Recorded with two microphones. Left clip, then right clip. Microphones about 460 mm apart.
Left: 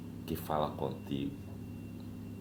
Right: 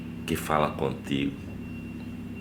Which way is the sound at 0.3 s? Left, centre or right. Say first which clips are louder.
Right 9 dB; left.